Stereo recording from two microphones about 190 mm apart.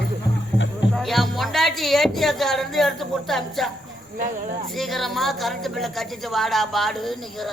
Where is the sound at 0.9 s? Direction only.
Centre (ahead or behind).